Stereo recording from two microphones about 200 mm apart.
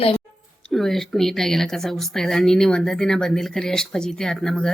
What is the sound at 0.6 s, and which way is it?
Speech, centre (ahead or behind).